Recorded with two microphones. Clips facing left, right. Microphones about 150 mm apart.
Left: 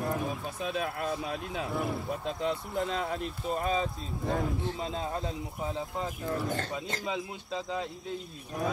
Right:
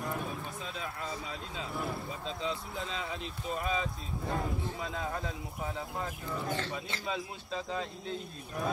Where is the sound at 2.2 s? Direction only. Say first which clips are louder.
Left 3 dB; 50° left (ahead or behind).